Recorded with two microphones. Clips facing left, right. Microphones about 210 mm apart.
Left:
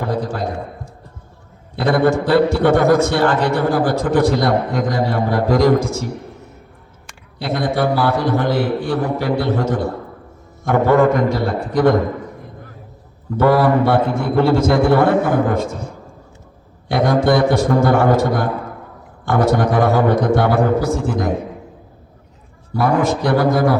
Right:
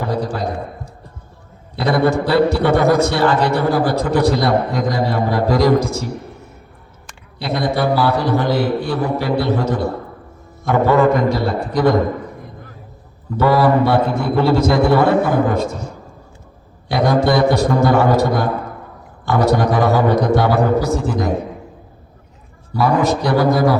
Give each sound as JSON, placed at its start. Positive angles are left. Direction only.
{"t": 0.0, "sound": "a man's voice", "side_deg": 50}
{"t": 1.7, "sound": "a man's voice", "side_deg": 50}
{"t": 7.3, "sound": "a man's voice", "side_deg": 50}
{"t": 13.3, "sound": "a man's voice", "side_deg": 55}
{"t": 16.9, "sound": "a man's voice", "side_deg": 55}
{"t": 22.7, "sound": "a man's voice", "side_deg": 50}